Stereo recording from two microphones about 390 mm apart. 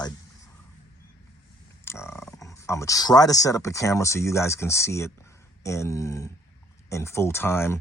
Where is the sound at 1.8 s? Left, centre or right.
Centre.